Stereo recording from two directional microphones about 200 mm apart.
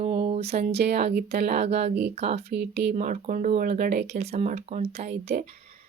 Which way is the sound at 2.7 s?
55° right (ahead or behind).